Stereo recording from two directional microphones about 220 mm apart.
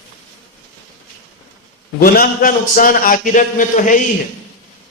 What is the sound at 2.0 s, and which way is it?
A man's voice, 40° left (ahead or behind).